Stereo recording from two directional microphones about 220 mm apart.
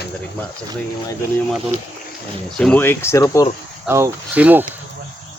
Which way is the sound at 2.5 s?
5° left (ahead or behind).